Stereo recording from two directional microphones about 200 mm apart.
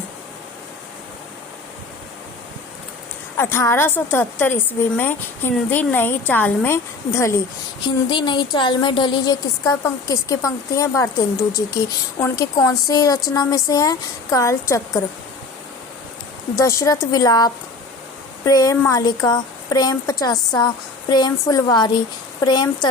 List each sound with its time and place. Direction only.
3.3 s a woman's voice: 15° left (ahead or behind)
16.6 s a woman's voice: 15° left (ahead or behind)